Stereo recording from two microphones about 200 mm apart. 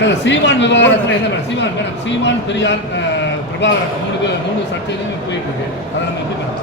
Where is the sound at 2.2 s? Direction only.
60° left (ahead or behind).